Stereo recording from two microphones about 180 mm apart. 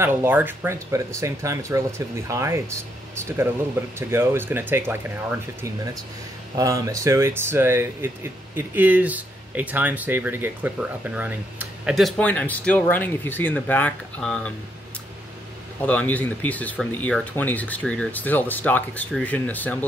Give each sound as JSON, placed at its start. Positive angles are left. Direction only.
{"t": 0.0, "sound": "speech", "side_deg": -10}
{"t": 6.5, "sound": "speech", "side_deg": -20}
{"t": 15.8, "sound": "speech", "side_deg": 10}